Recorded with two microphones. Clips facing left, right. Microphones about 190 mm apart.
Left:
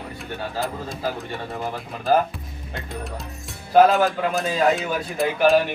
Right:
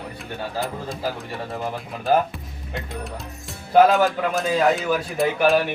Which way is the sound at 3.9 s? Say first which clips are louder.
Right 1 dB; centre (ahead or behind).